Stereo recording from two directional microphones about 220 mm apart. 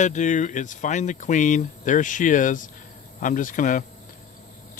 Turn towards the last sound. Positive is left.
turn(degrees=35)  # may be behind; listen again after turning